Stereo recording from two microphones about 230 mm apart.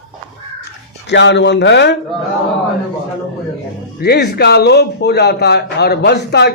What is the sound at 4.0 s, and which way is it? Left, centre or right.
A man's voice, left.